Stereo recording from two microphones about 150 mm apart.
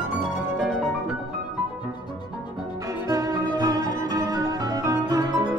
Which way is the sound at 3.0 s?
20° right (ahead or behind).